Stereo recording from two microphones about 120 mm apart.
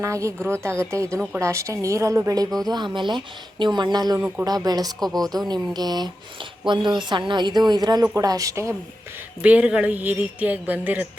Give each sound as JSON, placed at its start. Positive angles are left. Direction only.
{"t": 0.0, "sound": "a woman's voice", "side_deg": -25}
{"t": 2.6, "sound": "speech", "side_deg": -40}
{"t": 4.9, "sound": "speech", "side_deg": 0}
{"t": 5.5, "sound": "a woman's voice", "side_deg": -35}
{"t": 9.4, "sound": "speech", "side_deg": -10}